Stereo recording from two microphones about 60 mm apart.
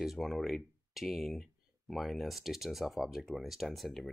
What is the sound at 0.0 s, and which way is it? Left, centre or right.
Speech, centre.